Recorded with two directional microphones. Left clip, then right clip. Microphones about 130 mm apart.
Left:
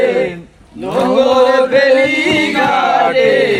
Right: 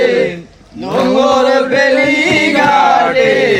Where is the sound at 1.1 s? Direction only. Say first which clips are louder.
Left 1 dB; 35° right (ahead or behind).